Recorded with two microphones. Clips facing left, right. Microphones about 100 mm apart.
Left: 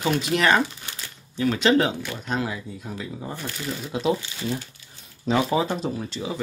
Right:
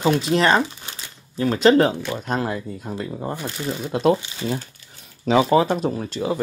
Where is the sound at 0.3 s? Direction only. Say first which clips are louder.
Right 3 dB; 30° right (ahead or behind); by 4.1 s 50° right (ahead or behind).